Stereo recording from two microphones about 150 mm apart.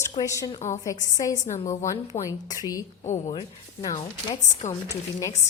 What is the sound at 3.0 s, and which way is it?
Speech, 50° left (ahead or behind).